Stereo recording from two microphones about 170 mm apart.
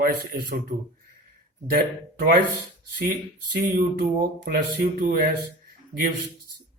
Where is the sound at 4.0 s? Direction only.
70° right (ahead or behind).